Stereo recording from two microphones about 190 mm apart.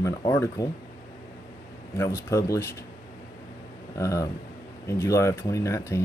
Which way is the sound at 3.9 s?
15° left (ahead or behind).